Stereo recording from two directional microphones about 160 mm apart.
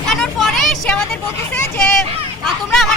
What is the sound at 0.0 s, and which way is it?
Vehicle, 5° left (ahead or behind).